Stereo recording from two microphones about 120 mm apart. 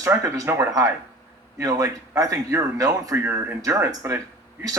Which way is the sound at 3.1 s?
20° right (ahead or behind).